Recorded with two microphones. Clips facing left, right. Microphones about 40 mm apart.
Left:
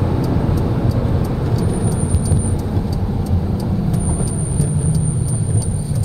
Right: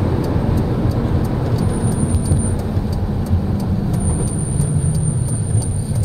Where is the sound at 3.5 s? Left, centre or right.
Right.